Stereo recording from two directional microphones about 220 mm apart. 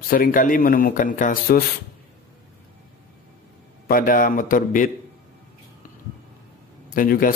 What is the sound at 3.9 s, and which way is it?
Speech, 40° left (ahead or behind).